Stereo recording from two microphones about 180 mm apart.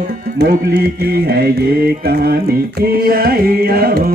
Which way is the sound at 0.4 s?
60° right (ahead or behind).